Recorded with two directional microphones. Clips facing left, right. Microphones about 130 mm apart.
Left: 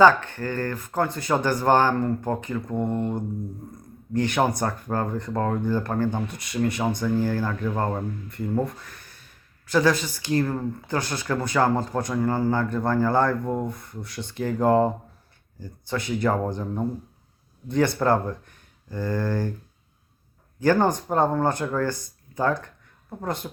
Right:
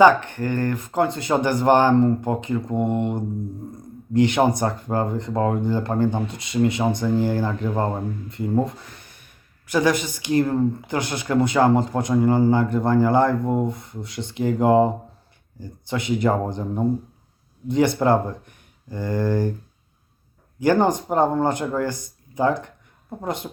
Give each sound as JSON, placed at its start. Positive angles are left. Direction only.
{"t": 0.0, "sound": "speech", "side_deg": -15}
{"t": 20.6, "sound": "speech", "side_deg": -15}